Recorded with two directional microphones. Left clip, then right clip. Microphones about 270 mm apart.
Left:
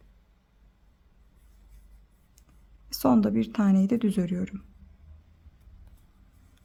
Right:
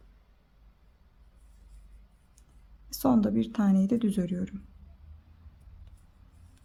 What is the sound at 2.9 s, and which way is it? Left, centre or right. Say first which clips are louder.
Speech: left 3 dB; centre.